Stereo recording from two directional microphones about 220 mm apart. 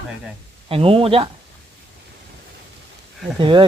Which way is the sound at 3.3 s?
20° right (ahead or behind).